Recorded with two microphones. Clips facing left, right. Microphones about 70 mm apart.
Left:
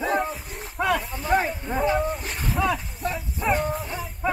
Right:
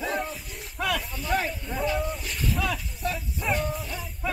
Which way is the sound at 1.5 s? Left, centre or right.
Left.